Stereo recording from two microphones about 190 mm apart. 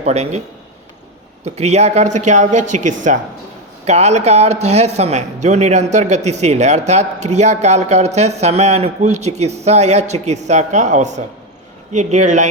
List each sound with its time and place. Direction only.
0.0 s speech: 35° right (ahead or behind)
1.5 s speech: 35° right (ahead or behind)